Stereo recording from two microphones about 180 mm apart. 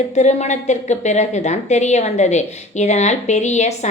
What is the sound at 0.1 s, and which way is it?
A woman's voice, 40° left (ahead or behind).